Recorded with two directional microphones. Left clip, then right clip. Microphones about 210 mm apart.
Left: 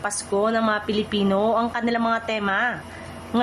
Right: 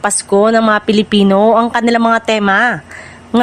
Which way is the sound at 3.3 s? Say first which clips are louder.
Right 10 dB; 40° right (ahead or behind).